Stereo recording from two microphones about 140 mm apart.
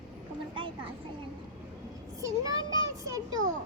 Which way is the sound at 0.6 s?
35° right (ahead or behind).